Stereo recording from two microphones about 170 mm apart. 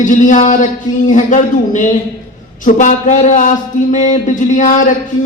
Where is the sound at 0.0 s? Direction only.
50° left (ahead or behind).